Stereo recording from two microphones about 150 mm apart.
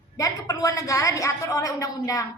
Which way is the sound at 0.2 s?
20° left (ahead or behind).